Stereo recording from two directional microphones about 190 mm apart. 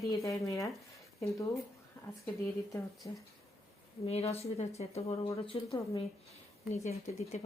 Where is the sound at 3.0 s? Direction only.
15° left (ahead or behind).